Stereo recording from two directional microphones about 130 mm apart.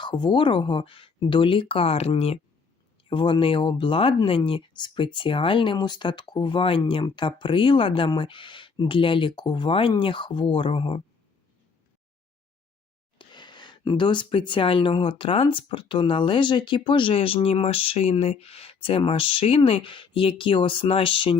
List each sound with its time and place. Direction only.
0.0 s speech: 35° left (ahead or behind)
13.1 s speech: 35° left (ahead or behind)